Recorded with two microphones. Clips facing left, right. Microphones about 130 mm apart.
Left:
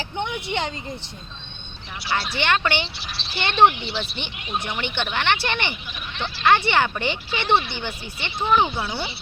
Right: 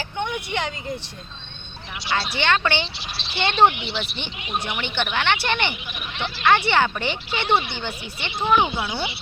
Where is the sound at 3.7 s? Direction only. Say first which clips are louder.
Even; 20° right (ahead or behind).